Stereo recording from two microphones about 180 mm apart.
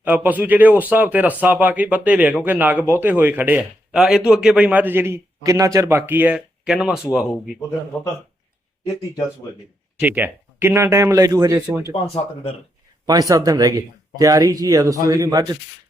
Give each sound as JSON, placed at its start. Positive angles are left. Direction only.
{"t": 0.0, "sound": "speech", "side_deg": -10}
{"t": 10.0, "sound": "speech", "side_deg": -10}
{"t": 12.1, "sound": "speech", "side_deg": 35}
{"t": 13.1, "sound": "speech", "side_deg": -20}